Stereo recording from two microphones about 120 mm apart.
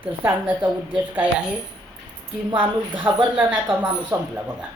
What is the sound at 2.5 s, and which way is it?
Speech, 40° right (ahead or behind).